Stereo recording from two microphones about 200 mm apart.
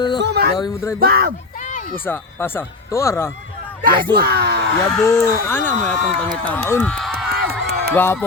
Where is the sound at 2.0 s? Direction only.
10° left (ahead or behind).